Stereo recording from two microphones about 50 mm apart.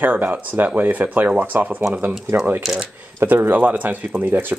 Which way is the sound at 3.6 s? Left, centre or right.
Right.